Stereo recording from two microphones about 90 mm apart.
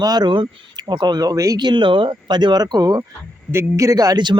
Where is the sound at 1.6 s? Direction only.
55° right (ahead or behind).